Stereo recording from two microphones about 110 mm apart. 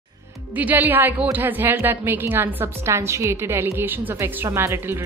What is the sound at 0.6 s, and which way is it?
Speech, 15° right (ahead or behind).